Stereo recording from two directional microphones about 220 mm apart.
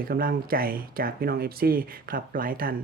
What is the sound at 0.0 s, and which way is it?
Speech, 40° right (ahead or behind).